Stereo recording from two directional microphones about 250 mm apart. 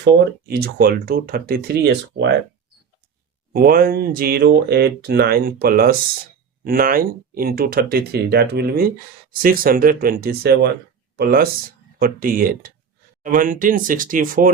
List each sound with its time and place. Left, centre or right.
0.0 s speech: right
3.5 s speech: right